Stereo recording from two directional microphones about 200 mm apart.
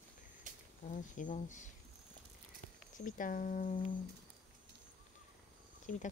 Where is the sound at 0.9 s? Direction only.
40° left (ahead or behind).